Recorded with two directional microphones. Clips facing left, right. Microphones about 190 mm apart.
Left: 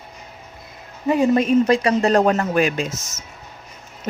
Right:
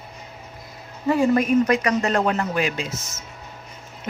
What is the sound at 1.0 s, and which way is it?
A man's voice, 20° left (ahead or behind).